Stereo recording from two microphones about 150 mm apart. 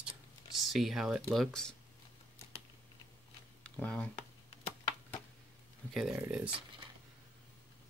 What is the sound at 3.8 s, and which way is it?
Speech, 10° left (ahead or behind).